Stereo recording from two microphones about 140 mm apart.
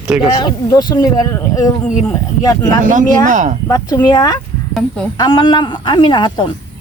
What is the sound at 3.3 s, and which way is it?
Speech, 65° right (ahead or behind).